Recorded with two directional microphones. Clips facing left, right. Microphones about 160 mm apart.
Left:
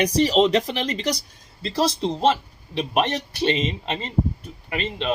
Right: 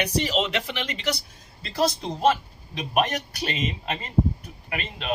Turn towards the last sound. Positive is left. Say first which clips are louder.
# left 6 dB
turn(degrees=30)  # may be behind; listen again after turning